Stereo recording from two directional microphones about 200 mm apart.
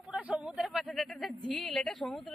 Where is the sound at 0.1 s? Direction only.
5° right (ahead or behind).